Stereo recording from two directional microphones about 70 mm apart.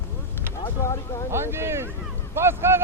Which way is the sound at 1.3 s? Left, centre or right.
Right.